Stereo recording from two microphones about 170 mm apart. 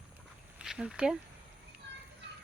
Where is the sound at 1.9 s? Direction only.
90° right.